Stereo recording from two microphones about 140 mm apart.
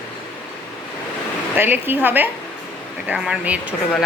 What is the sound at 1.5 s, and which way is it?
Speech, 15° right (ahead or behind).